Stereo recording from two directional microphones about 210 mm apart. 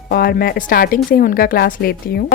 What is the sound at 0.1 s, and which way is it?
A woman's voice, 45° left (ahead or behind).